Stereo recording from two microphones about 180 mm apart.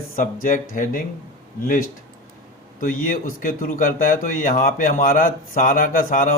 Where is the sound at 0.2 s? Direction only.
45° left (ahead or behind).